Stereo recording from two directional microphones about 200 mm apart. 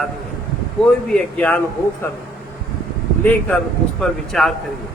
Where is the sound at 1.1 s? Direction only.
5° left (ahead or behind).